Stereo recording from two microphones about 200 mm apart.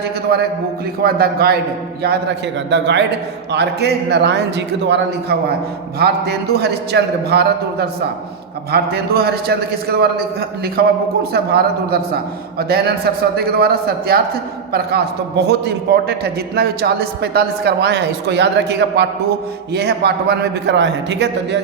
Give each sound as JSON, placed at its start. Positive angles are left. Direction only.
{"t": 0.3, "sound": "a man's voice", "side_deg": -50}
{"t": 2.6, "sound": "a man's voice", "side_deg": -60}